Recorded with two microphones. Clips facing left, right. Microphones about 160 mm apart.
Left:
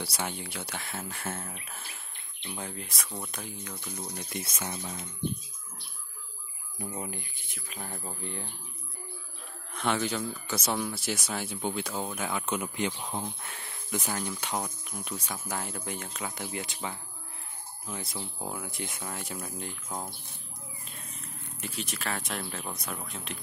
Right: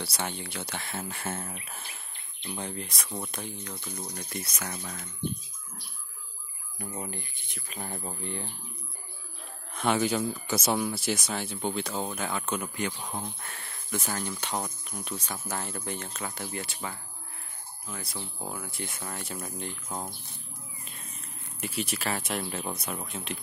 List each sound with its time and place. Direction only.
0.0 s speech: 10° left (ahead or behind)
4.1 s speech: 15° left (ahead or behind)
6.9 s speech: 5° left (ahead or behind)
9.8 s speech: 10° right (ahead or behind)
21.5 s speech: 5° right (ahead or behind)